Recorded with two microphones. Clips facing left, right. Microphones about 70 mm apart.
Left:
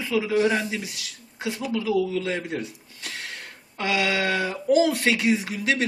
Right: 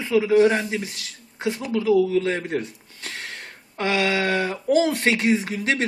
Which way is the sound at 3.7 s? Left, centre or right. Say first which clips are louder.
Right 2 dB; right.